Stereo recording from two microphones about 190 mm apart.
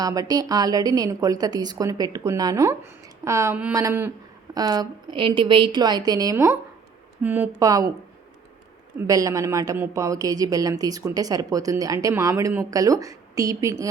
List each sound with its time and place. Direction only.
0.0 s a woman's voice: 20° right (ahead or behind)
9.0 s speech: 15° right (ahead or behind)